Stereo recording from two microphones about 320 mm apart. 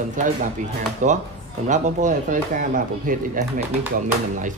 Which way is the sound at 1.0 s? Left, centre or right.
Right.